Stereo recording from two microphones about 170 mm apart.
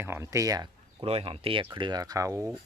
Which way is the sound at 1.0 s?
35° right (ahead or behind).